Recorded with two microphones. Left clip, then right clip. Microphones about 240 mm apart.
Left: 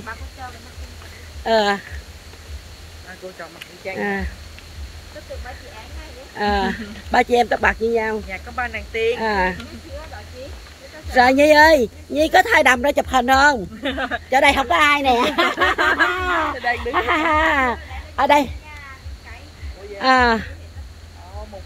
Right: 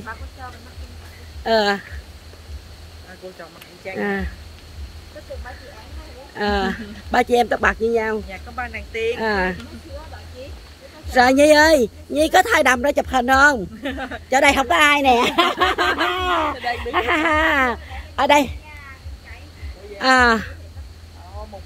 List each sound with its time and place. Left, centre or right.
1.4 s speech: centre
4.0 s speech: centre
6.3 s speech: centre
8.3 s speech: centre
9.1 s speech: centre
11.1 s speech: centre
13.8 s speech: centre
14.3 s a woman's voice: centre
15.8 s speech: centre
16.1 s speech: centre
20.0 s speech: centre